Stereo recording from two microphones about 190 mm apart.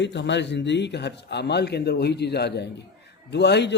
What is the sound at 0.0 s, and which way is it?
A man's voice, 70° left (ahead or behind).